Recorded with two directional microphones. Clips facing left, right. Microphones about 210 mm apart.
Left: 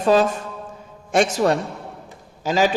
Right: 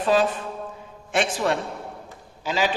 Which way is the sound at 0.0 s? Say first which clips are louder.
Left 4 dB; 45° left (ahead or behind).